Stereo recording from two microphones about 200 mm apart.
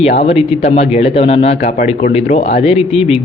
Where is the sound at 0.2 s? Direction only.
30° left (ahead or behind).